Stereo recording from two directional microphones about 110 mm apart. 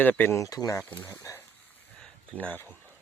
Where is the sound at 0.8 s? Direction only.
20° left (ahead or behind).